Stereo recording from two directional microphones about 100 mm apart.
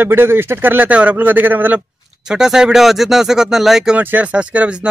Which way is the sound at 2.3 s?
5° right (ahead or behind).